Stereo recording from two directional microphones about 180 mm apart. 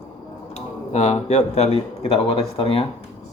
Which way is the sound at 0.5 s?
40° left (ahead or behind).